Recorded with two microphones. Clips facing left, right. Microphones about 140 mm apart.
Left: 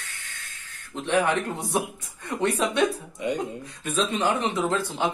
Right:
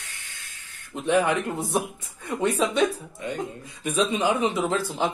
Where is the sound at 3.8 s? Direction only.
15° right (ahead or behind).